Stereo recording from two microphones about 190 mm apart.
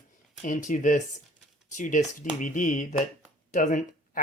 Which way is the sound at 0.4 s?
40° left (ahead or behind).